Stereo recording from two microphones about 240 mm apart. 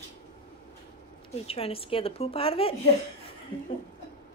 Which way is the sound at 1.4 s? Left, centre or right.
Left.